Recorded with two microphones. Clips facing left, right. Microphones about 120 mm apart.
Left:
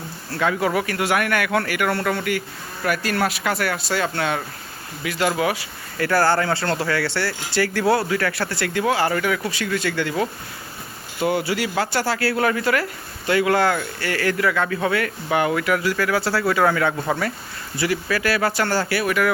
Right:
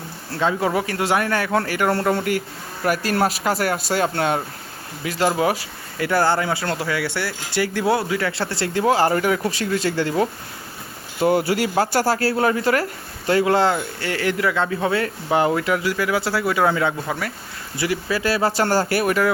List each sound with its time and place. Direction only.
0.3 s speech: 25° right (ahead or behind)
6.0 s speech: 20° right (ahead or behind)
17.1 s speech: 5° right (ahead or behind)
17.7 s speech: 20° right (ahead or behind); by 19.1 s 45° right (ahead or behind)